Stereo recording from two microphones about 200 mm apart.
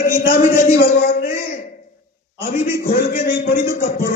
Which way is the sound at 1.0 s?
45° left (ahead or behind).